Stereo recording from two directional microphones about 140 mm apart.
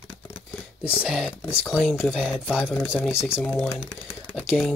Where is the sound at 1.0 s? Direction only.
5° right (ahead or behind).